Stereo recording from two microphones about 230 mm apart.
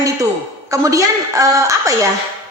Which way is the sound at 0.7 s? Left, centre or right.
Centre.